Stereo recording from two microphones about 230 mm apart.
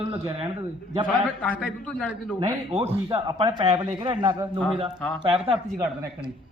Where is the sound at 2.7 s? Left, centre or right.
Right.